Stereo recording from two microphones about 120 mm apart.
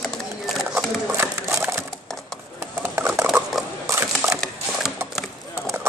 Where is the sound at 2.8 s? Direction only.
20° right (ahead or behind).